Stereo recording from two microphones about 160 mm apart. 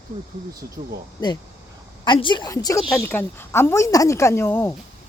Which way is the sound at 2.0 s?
30° left (ahead or behind).